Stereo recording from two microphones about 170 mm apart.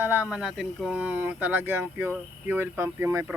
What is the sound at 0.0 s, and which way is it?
Speech, 10° right (ahead or behind).